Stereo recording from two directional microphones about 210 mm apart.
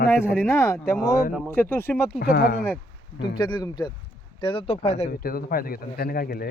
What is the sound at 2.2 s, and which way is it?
Speech, 50° left (ahead or behind).